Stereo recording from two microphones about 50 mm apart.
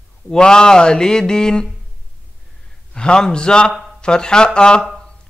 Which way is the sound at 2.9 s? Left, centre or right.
Centre.